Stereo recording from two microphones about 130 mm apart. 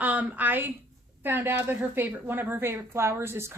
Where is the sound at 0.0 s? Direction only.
15° right (ahead or behind).